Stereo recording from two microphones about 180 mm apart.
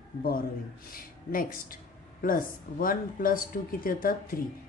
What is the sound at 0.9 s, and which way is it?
A woman's voice, 50° left (ahead or behind).